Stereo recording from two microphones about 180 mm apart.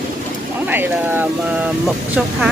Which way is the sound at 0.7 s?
10° right (ahead or behind).